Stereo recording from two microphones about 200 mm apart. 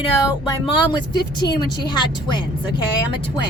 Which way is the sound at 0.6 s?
20° left (ahead or behind).